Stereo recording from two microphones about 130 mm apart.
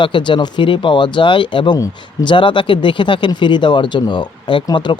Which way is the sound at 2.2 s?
40° left (ahead or behind).